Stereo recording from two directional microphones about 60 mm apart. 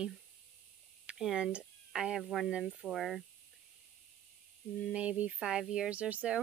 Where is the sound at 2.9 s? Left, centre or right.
Centre.